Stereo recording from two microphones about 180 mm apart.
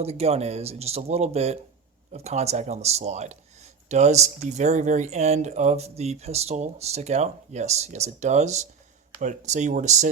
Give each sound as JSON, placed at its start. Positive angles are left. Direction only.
{"t": 0.0, "sound": "speech", "side_deg": -35}